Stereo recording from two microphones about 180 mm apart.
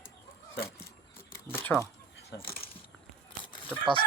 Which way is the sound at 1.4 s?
10° left (ahead or behind).